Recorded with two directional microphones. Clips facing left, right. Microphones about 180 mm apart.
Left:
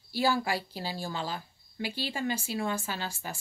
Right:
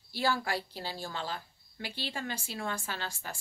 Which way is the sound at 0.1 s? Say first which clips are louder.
Left 3 dB; 10° left (ahead or behind).